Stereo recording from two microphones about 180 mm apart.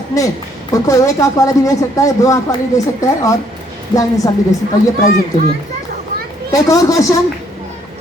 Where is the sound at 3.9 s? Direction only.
20° left (ahead or behind).